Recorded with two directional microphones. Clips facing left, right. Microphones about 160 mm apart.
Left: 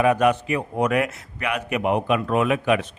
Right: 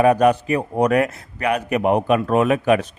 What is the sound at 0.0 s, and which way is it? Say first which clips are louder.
A man's voice: right 4 dB; 40° right (ahead or behind).